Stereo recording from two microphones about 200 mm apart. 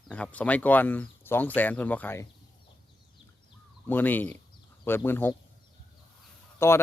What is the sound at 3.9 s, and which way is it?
Speech, 10° left (ahead or behind).